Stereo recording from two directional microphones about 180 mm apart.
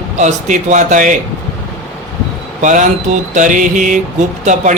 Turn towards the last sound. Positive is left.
turn(degrees=-45)  # may be behind; listen again after turning